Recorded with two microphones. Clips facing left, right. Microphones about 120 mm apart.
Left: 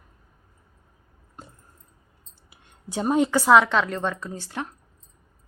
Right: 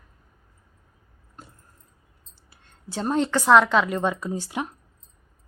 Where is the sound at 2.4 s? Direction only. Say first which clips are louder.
Left 1 dB; 15° left (ahead or behind); by 4.7 s 15° right (ahead or behind).